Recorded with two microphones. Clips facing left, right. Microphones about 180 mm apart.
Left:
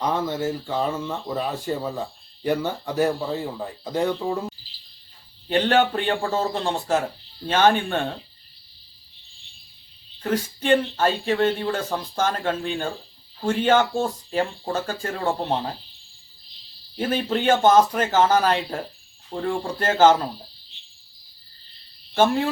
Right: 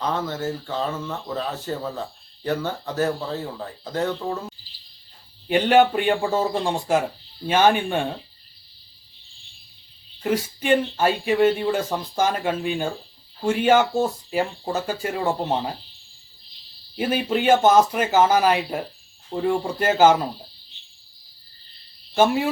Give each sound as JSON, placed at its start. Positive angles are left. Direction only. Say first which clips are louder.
{"t": 0.0, "sound": "speech", "louder": "left 2 dB", "side_deg": 15}
{"t": 5.5, "sound": "speech", "louder": "right 3 dB", "side_deg": -10}
{"t": 10.2, "sound": "speech", "louder": "right 1 dB", "side_deg": -10}
{"t": 17.0, "sound": "speech", "louder": "right 1 dB", "side_deg": -10}
{"t": 22.1, "sound": "cricket", "louder": "right 1 dB", "side_deg": -10}